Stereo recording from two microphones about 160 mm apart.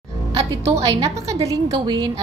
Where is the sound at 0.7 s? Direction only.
20° right (ahead or behind).